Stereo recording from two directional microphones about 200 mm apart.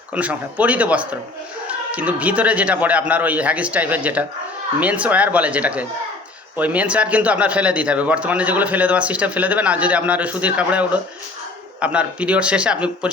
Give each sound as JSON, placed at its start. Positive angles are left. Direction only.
{"t": 0.1, "sound": "a man's voice", "side_deg": -5}